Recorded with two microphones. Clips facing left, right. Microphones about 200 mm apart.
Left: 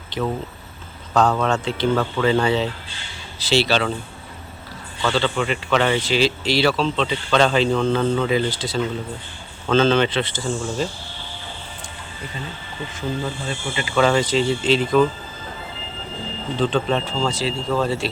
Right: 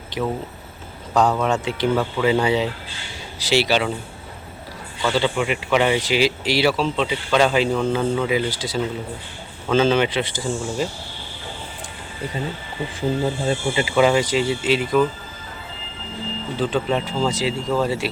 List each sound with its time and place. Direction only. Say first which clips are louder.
1.1 s speech: even; 15° right (ahead or behind)
5.0 s speech: right 1 dB; 15° right (ahead or behind)
13.0 s speech: right 5 dB; 30° right (ahead or behind); by 15.0 s 10° right (ahead or behind)
16.6 s speech: left 1 dB; 10° right (ahead or behind)